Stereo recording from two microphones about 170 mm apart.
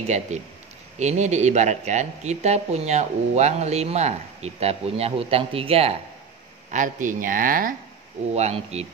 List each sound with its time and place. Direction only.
0.0 s speech: 40° right (ahead or behind)
6.7 s speech: 50° right (ahead or behind)
8.3 s speech: 40° right (ahead or behind)